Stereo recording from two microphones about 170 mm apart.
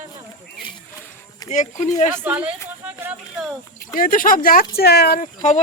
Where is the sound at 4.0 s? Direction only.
55° left (ahead or behind).